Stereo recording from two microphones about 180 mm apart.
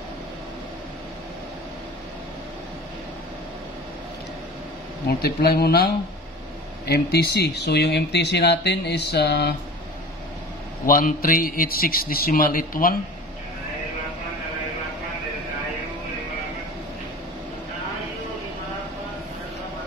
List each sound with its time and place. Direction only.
5.0 s speech: 60° left (ahead or behind)
6.9 s speech: 65° left (ahead or behind)
10.9 s a man's voice: 50° left (ahead or behind)